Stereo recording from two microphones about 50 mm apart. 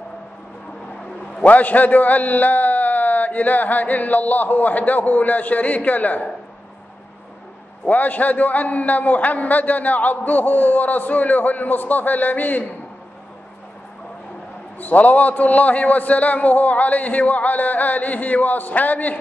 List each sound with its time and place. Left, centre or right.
1.4 s a man's voice: left
7.8 s a man's voice: left
14.8 s a man's voice: left